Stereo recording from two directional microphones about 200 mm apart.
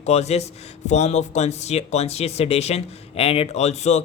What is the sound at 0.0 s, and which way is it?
A man's voice, 30° left (ahead or behind).